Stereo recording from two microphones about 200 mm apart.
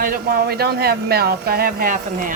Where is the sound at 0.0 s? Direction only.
45° right (ahead or behind).